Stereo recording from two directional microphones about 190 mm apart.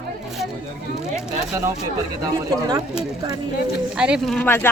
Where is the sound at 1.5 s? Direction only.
15° right (ahead or behind).